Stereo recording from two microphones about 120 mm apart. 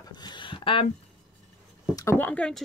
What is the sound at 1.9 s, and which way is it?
Speech, 30° left (ahead or behind).